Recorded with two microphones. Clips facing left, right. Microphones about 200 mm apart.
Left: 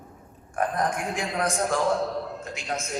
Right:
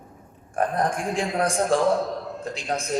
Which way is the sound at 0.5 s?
30° right (ahead or behind).